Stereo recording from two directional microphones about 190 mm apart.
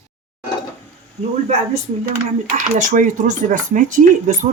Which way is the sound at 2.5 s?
40° right (ahead or behind).